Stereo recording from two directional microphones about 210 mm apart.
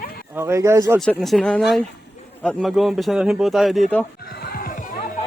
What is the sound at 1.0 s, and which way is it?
A man's voice, centre (ahead or behind).